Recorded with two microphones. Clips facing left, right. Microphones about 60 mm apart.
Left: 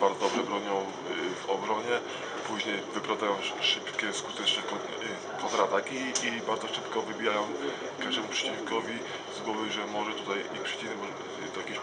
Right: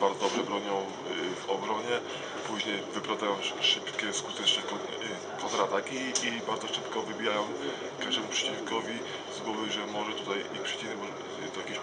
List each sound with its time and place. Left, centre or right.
0.0 s a sound: centre
2.7 s speech: centre
5.4 s speech: centre
9.5 s speech: centre